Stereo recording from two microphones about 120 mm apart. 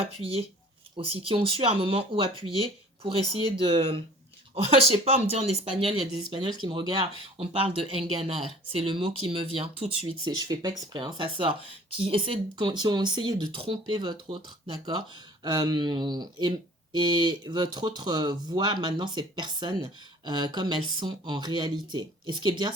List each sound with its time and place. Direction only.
0.0 s speech: 55° right (ahead or behind)
6.1 s speech: 40° right (ahead or behind)
10.2 s speech: 35° right (ahead or behind)